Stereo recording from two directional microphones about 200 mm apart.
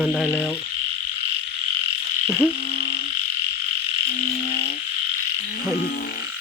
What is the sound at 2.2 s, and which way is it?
Frog, 10° left (ahead or behind).